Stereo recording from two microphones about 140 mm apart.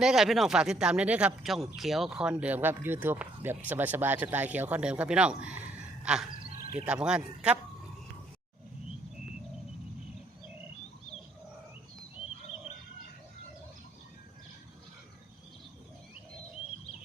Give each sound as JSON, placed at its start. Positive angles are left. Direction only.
{"t": 0.0, "sound": "speech", "side_deg": -5}
{"t": 6.5, "sound": "a sound", "side_deg": 90}
{"t": 6.7, "sound": "speech", "side_deg": -10}